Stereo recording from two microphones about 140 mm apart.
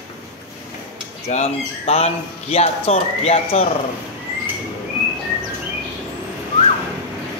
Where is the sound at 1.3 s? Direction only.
50° left (ahead or behind).